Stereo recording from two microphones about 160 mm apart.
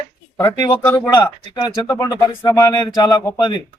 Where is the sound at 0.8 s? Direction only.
15° left (ahead or behind).